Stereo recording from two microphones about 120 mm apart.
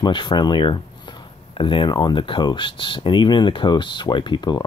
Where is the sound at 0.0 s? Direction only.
40° left (ahead or behind).